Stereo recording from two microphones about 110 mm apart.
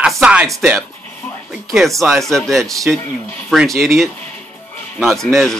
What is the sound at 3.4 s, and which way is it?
Speech, centre (ahead or behind).